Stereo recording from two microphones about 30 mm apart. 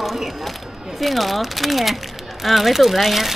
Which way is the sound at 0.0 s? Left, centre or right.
Centre.